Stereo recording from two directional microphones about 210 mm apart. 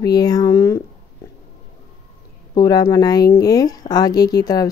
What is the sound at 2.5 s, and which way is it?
Speech, 15° left (ahead or behind).